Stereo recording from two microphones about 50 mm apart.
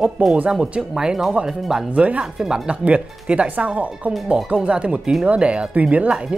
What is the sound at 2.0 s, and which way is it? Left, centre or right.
Speech, right.